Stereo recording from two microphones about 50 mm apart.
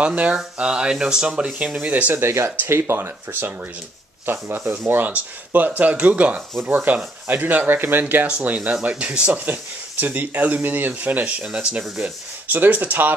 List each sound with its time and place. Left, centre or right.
0.0 s speech: right
2.1 s speech: right
5.1 s speech: right
8.9 s speech: right
9.3 s speech: right